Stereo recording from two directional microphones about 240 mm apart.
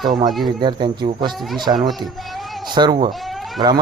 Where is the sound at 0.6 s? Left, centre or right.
Centre.